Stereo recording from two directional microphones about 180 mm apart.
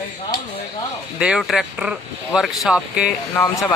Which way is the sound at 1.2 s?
Centre (ahead or behind).